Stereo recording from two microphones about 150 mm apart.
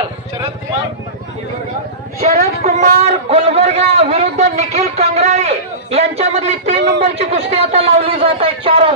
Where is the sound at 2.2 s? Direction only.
50° right (ahead or behind).